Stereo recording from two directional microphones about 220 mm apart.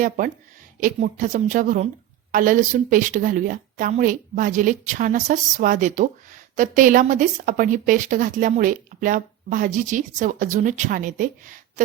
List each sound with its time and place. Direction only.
0.8 s a woman's voice: 35° right (ahead or behind)